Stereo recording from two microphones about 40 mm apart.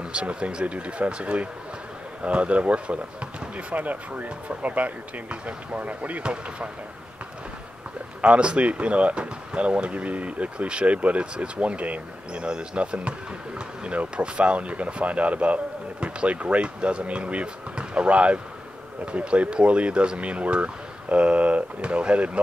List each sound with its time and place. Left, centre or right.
0.0 s speech: right
8.2 s speech: right